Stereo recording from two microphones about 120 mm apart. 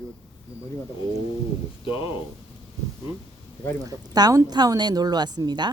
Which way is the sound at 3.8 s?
30° right (ahead or behind).